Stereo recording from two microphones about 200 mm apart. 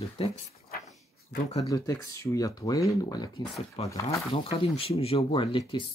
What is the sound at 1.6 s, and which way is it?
Speech, 15° left (ahead or behind).